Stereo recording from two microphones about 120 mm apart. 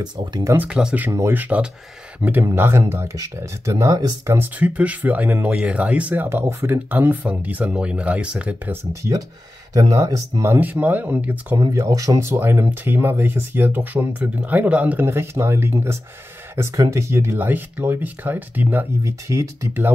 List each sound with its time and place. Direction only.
0.0 s speech: 35° right (ahead or behind)
0.7 s speech: 5° right (ahead or behind)
9.8 s speech: 30° right (ahead or behind); by 11.5 s 15° right (ahead or behind)
11.5 s speech: 25° right (ahead or behind)